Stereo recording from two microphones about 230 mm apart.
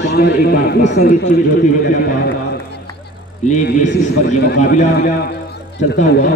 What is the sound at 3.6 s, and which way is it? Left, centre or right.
A man's voice, left.